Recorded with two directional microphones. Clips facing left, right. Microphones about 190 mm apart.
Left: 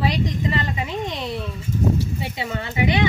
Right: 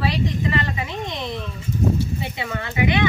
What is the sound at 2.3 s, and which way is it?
Speech, 20° left (ahead or behind).